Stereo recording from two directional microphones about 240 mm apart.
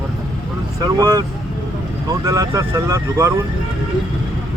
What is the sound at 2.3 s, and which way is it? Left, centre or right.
Speech, centre.